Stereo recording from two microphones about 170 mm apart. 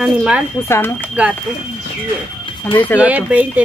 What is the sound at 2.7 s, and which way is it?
Speech, 10° left (ahead or behind).